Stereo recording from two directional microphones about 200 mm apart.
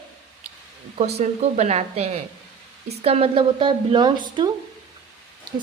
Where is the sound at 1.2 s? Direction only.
35° right (ahead or behind).